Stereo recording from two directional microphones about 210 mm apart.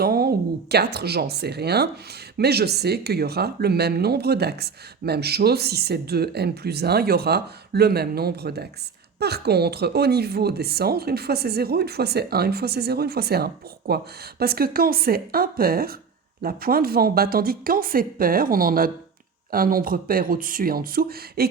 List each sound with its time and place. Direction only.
0.0 s speech: 45° right (ahead or behind)